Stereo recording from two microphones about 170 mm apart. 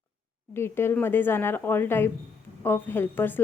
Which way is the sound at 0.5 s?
15° left (ahead or behind).